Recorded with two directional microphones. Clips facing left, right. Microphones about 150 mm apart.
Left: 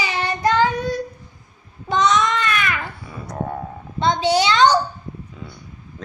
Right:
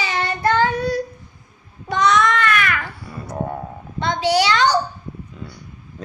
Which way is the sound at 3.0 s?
5° right (ahead or behind).